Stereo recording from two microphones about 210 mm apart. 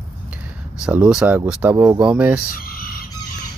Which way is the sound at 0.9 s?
5° right (ahead or behind).